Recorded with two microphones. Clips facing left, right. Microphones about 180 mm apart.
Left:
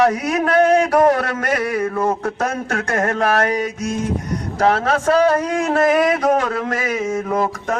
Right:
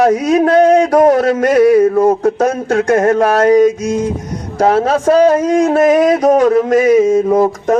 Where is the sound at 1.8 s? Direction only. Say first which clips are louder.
Right 10 dB; 40° right (ahead or behind).